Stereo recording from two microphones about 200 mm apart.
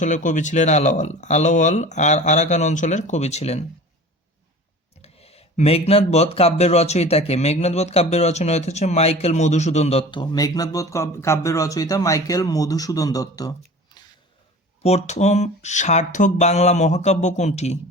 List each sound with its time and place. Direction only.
0.0 s speech: 40° left (ahead or behind)
5.0 s speech: 30° left (ahead or behind)
14.8 s speech: 35° left (ahead or behind)